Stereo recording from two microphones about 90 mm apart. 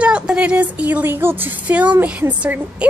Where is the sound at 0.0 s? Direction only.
10° right (ahead or behind).